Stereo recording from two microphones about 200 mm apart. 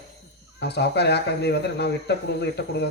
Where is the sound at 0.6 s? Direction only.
60° left (ahead or behind).